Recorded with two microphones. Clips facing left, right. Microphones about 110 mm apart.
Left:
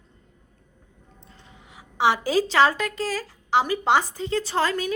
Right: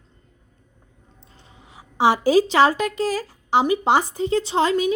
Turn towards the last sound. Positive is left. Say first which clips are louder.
# right 5 dB
turn(degrees=-20)  # may be behind; listen again after turning